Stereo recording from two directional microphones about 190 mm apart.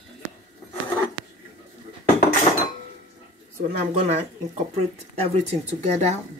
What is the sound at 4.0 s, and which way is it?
Speech, 35° right (ahead or behind).